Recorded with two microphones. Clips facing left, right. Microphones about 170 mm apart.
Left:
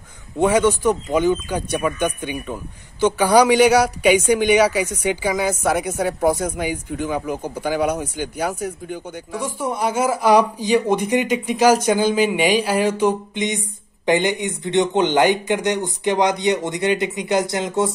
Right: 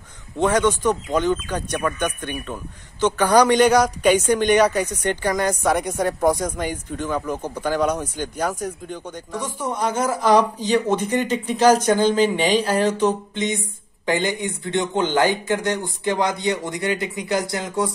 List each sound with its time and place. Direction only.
0.4 s a woman's voice: 10° left (ahead or behind)